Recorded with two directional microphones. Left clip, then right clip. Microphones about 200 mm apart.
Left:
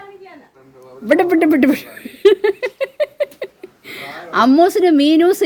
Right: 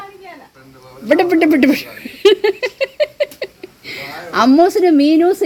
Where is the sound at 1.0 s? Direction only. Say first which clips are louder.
Right 1 dB; 5° left (ahead or behind).